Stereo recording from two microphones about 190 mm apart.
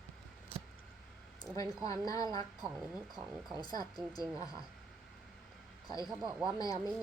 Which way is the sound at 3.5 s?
20° left (ahead or behind).